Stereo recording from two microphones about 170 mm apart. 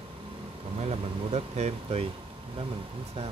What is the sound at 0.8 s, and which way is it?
Speech, 40° right (ahead or behind).